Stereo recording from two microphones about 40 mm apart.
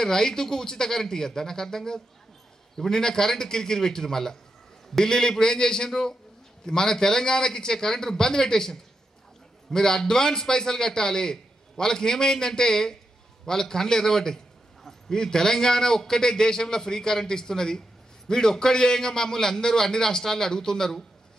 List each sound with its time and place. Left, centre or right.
0.0 s a man's voice: centre